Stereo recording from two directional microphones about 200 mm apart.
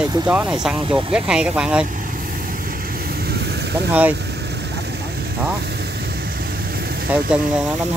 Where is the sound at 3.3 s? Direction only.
55° right (ahead or behind).